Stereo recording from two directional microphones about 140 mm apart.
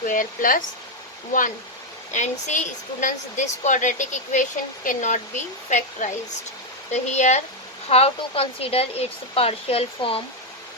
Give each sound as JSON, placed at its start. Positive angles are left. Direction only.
{"t": 0.0, "sound": "speech", "side_deg": 75}
{"t": 2.1, "sound": "a woman's voice", "side_deg": 60}
{"t": 7.9, "sound": "speech", "side_deg": 45}